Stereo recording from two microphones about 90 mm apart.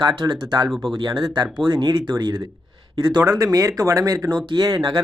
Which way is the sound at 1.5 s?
60° right (ahead or behind).